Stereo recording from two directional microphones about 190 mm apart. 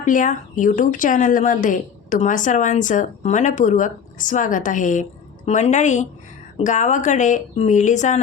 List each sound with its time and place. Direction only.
0.0 s speech: 40° left (ahead or behind)